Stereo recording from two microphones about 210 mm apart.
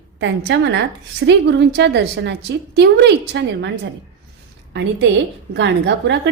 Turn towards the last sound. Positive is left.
turn(degrees=-55)  # may be behind; listen again after turning